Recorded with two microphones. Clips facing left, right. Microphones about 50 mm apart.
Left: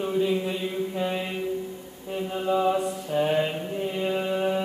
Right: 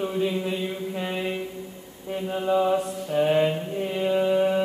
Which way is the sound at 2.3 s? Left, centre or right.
Centre.